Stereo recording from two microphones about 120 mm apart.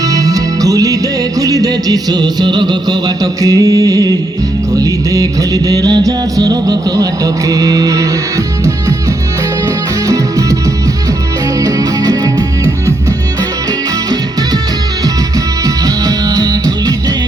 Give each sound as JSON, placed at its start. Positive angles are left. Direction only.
{"t": 0.1, "sound": "music", "side_deg": -30}
{"t": 11.6, "sound": "music", "side_deg": -30}
{"t": 16.0, "sound": "music", "side_deg": -30}